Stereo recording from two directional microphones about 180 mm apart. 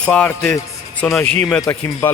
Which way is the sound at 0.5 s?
15° left (ahead or behind).